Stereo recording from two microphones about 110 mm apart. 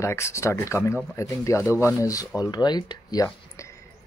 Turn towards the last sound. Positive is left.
turn(degrees=40)  # may be behind; listen again after turning